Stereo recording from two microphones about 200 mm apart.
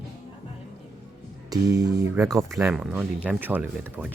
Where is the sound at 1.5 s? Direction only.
20° right (ahead or behind).